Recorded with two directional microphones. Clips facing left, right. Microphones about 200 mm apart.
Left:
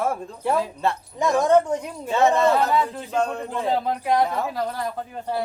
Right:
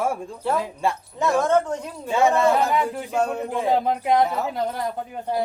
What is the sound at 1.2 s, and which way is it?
Speech, 15° left (ahead or behind).